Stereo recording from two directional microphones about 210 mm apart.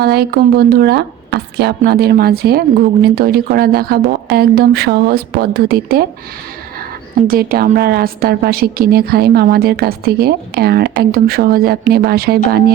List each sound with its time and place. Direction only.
0.0 s a woman's voice: 50° right (ahead or behind)
7.3 s a woman's voice: 45° right (ahead or behind)